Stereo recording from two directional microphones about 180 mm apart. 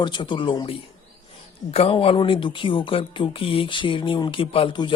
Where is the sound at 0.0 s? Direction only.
25° left (ahead or behind).